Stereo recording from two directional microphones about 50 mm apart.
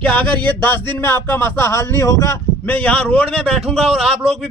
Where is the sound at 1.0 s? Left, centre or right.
Left.